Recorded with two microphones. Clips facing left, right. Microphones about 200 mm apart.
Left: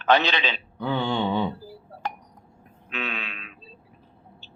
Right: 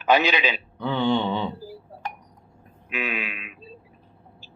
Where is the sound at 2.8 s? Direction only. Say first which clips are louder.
Right 3 dB; 10° right (ahead or behind).